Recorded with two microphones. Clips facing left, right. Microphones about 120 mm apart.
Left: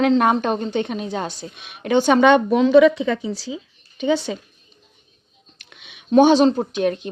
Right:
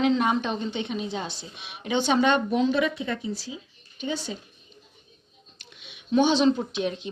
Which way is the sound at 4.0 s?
80° left.